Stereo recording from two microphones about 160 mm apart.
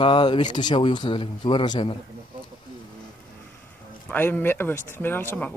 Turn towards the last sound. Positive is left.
turn(degrees=15)  # may be behind; listen again after turning